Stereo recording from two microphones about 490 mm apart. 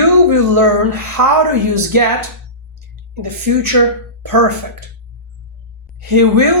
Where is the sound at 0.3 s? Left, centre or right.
Right.